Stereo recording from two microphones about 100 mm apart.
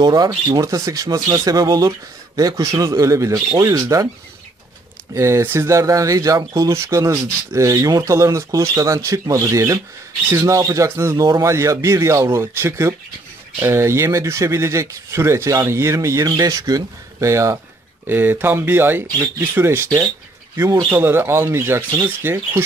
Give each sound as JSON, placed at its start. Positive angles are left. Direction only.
{"t": 0.0, "sound": "speech", "side_deg": -45}
{"t": 5.1, "sound": "speech", "side_deg": -30}
{"t": 18.0, "sound": "speech", "side_deg": -20}